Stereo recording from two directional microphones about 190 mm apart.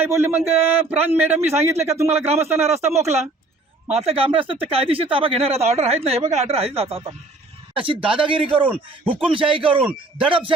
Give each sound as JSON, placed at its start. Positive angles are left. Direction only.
{"t": 0.0, "sound": "a man's voice", "side_deg": -10}
{"t": 3.8, "sound": "speech", "side_deg": -30}